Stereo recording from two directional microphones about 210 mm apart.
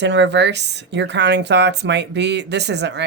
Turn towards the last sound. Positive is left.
turn(degrees=-55)  # may be behind; listen again after turning